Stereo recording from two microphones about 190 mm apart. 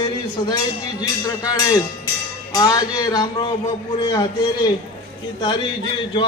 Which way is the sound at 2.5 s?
20° left (ahead or behind).